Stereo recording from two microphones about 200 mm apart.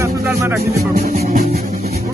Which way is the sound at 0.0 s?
15° right (ahead or behind).